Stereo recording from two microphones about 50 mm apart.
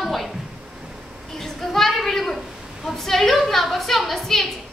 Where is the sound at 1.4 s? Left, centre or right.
Centre.